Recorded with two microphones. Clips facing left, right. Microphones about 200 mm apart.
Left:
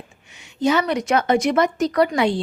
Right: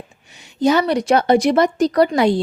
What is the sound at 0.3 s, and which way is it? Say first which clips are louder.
A woman's voice: right 3 dB; 35° right (ahead or behind).